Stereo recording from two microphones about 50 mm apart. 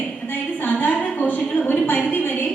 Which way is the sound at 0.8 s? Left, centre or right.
Left.